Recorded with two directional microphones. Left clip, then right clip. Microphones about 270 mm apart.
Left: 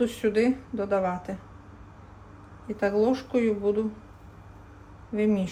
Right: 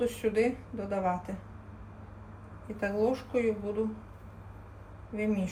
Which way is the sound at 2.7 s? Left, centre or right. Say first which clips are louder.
Left 5 dB; left.